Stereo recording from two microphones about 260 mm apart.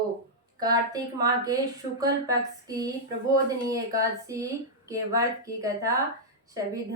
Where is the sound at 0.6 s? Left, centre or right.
Centre.